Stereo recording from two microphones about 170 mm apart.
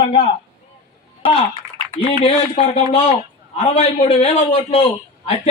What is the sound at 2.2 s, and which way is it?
A man's voice, 35° left (ahead or behind).